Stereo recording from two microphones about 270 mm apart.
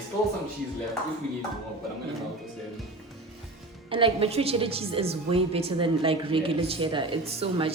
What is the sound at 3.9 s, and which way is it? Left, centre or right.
A woman's voice, centre.